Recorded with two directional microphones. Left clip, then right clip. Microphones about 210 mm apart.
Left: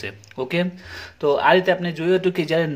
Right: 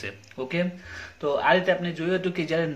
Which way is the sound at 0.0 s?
40° left (ahead or behind).